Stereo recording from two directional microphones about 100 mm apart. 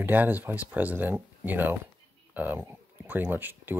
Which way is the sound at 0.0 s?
20° right (ahead or behind).